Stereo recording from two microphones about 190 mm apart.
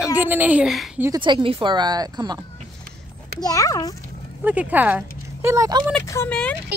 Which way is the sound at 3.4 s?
20° left (ahead or behind).